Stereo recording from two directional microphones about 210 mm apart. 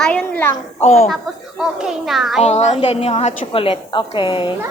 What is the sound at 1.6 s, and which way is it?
Speech, centre (ahead or behind).